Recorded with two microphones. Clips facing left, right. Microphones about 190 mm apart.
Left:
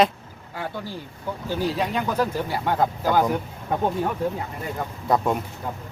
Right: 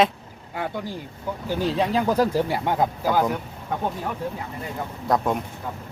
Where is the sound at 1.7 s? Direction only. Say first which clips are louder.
Right 3 dB; 30° right (ahead or behind).